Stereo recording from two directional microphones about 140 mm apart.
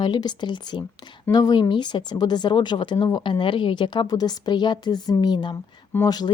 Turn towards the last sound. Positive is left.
turn(degrees=30)  # may be behind; listen again after turning